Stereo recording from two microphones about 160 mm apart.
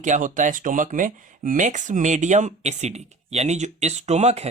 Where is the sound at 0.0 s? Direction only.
50° right (ahead or behind).